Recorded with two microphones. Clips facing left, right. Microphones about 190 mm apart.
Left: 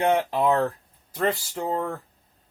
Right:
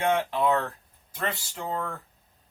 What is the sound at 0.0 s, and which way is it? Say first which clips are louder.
Speech: left 3 dB; 40° left (ahead or behind).